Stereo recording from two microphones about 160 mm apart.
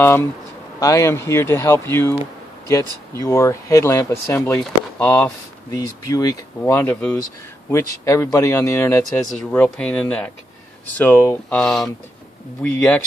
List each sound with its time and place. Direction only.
0.0 s speech: 15° left (ahead or behind)
4.9 s speech: 10° left (ahead or behind)
5.7 s speech: 20° left (ahead or behind)